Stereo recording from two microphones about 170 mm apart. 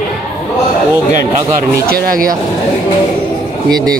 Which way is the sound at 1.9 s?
60° right (ahead or behind).